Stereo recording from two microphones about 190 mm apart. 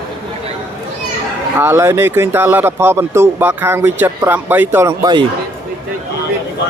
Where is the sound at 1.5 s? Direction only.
10° right (ahead or behind).